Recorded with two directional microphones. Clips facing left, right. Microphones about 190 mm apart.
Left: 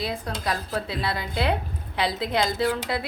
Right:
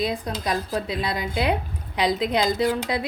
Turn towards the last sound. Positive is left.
turn(degrees=-15)  # may be behind; listen again after turning